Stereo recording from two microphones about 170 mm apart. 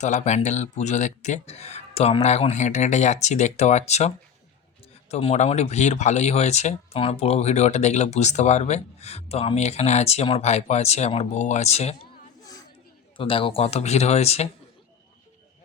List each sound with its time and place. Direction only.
0.0 s speech: 45° left (ahead or behind)
5.1 s speech: 40° left (ahead or behind)
13.1 s speech: 30° left (ahead or behind)